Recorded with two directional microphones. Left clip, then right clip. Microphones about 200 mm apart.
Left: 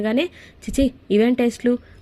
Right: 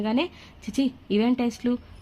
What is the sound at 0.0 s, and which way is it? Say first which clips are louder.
A woman's voice: left 5 dB; 10° left (ahead or behind).